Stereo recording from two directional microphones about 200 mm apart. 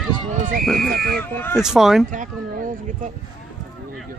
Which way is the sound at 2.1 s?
40° right (ahead or behind).